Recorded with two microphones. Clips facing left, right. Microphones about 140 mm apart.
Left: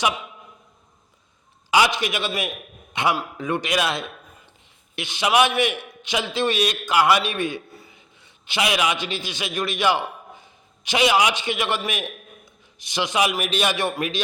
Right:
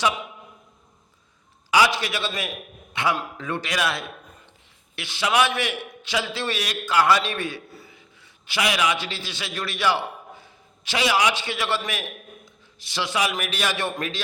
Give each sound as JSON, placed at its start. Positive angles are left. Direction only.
{"t": 1.7, "sound": "a man's voice", "side_deg": 20}